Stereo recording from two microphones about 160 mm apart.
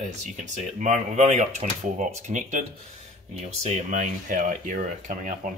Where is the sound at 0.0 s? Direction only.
50° right (ahead or behind).